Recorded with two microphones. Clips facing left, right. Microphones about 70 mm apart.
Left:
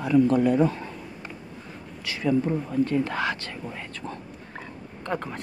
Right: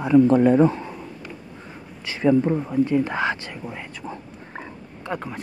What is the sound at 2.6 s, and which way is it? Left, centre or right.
Speech, centre.